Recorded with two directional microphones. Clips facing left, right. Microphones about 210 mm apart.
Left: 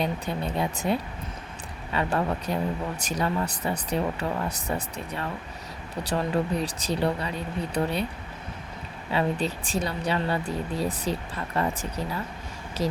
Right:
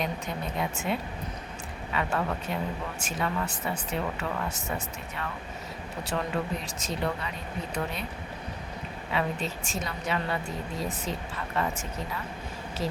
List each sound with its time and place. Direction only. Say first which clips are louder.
0.0 s speech: left 4 dB; 30° left (ahead or behind)
6.0 s speech: left 5 dB; 35° left (ahead or behind)
9.1 s speech: left 4 dB; 35° left (ahead or behind)